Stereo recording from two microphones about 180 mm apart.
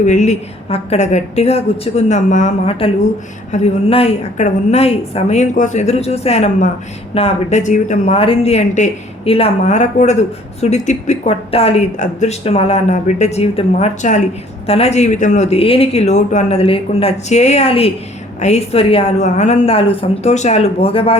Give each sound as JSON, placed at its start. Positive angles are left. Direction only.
{"t": 0.0, "sound": "a woman's voice", "side_deg": 40}